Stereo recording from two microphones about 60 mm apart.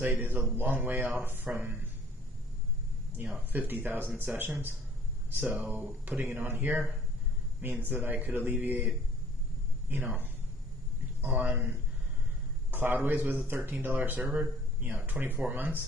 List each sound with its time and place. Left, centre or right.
0.0 s speech: right
3.2 s speech: right
9.9 s speech: right